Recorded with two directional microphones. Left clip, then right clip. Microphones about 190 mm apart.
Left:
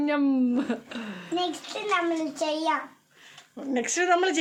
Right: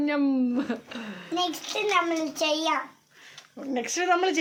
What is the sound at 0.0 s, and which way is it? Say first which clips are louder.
A woman's voice: left 1 dB; 10° left (ahead or behind).